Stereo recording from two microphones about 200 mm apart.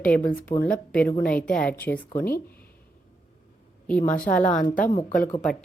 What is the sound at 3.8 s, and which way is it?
Speech, 5° left (ahead or behind).